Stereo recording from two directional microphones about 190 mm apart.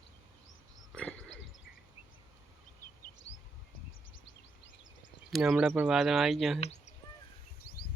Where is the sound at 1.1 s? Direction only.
80° left.